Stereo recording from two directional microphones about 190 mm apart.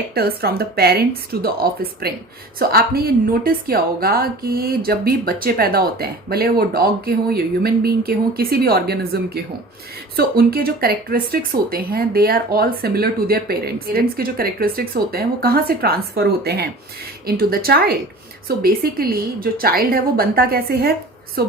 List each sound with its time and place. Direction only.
0.1 s a woman's voice: 55° right (ahead or behind)